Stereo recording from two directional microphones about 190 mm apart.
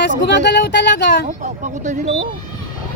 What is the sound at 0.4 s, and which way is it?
Speech, 65° left (ahead or behind).